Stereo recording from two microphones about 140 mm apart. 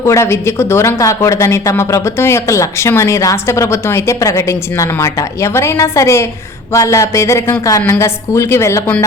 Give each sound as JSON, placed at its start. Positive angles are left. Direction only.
{"t": 0.0, "sound": "speech", "side_deg": 20}